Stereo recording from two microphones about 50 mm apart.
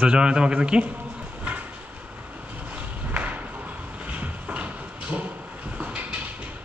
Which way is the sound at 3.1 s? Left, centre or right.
Right.